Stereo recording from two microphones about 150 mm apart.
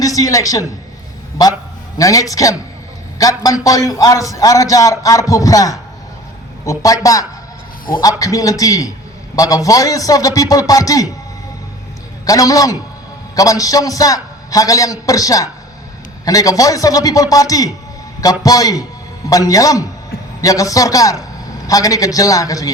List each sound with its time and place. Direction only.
0.0 s a man's voice: 20° left (ahead or behind)
2.0 s a man's voice: 25° left (ahead or behind)
12.2 s a man's voice: 25° left (ahead or behind)